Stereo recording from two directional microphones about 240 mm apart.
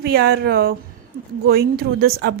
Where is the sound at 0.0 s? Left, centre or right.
Right.